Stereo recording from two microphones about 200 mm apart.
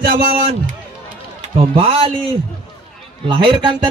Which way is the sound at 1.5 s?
30° right (ahead or behind).